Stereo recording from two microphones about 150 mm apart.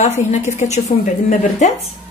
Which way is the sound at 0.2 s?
50° left (ahead or behind).